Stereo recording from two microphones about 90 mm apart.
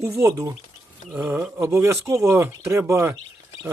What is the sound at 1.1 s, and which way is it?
Speech, 20° right (ahead or behind).